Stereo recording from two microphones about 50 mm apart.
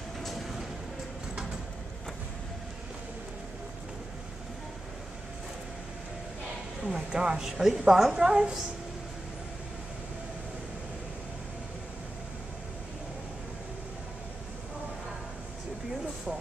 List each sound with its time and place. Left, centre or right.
0.2 s train: centre
6.8 s a woman's voice: centre